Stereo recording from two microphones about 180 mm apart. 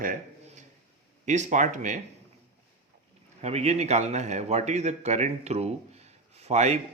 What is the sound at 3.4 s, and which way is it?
Speech, 40° right (ahead or behind).